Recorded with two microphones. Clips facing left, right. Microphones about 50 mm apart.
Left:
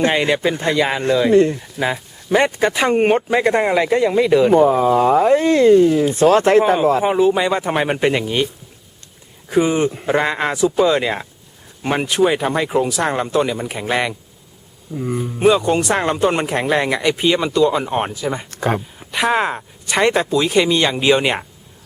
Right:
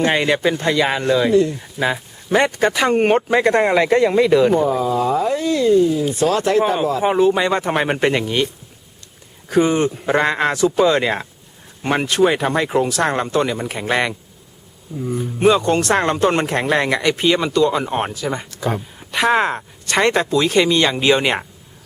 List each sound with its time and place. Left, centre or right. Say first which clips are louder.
0.5 s speech: even; centre
1.3 s speech: left 5 dB; left
1.5 s speech: even; centre
4.5 s speech: left 5 dB; left
7.0 s speech: even; centre
9.5 s speech: even; centre
10.1 s speech: right 3 dB; centre
14.9 s speech: left 1 dB; left
15.2 s speech: even; centre
18.5 s speech: left 3 dB; left
18.9 s speech: right 4 dB; centre